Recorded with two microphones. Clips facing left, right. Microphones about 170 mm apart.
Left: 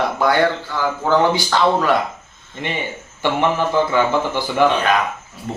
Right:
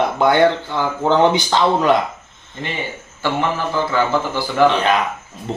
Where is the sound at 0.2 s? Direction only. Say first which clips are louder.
Right 4 dB; 20° right (ahead or behind).